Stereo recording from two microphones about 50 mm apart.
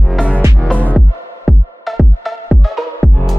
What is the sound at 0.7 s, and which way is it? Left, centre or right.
Music, left.